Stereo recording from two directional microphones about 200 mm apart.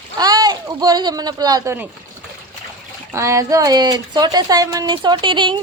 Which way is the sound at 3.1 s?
15° right (ahead or behind).